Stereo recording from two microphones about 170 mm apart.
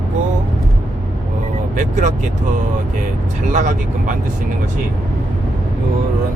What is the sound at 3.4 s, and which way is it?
Speech, 45° right (ahead or behind).